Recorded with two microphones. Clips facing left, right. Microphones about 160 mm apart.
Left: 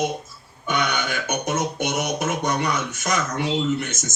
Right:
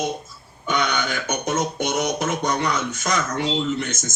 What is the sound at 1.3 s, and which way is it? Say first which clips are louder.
Music: even; 15° right (ahead or behind).